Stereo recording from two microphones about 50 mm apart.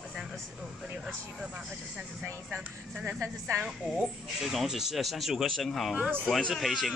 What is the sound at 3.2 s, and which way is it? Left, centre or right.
Speech, right.